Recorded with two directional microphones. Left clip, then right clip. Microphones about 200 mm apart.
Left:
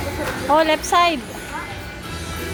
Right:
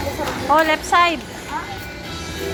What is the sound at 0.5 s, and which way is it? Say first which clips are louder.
Speech: right 1 dB; 30° left (ahead or behind).